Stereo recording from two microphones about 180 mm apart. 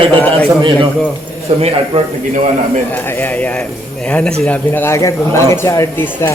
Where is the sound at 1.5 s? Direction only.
35° right (ahead or behind).